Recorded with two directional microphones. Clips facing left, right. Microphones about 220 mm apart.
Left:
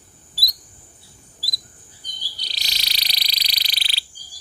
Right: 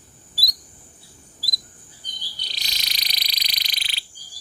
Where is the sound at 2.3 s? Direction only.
35° left (ahead or behind).